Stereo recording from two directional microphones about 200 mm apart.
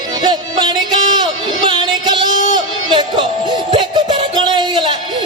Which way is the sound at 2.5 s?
25° right (ahead or behind).